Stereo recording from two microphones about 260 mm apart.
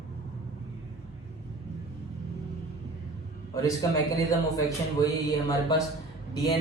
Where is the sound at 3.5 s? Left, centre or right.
Centre.